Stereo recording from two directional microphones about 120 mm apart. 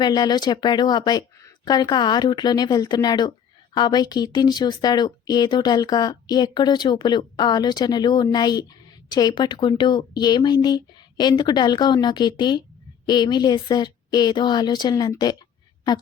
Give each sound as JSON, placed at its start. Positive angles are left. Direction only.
{"t": 0.0, "sound": "speech", "side_deg": 35}